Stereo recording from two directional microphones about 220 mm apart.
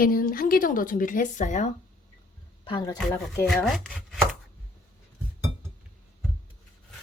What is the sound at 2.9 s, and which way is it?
Chopping, 5° left (ahead or behind).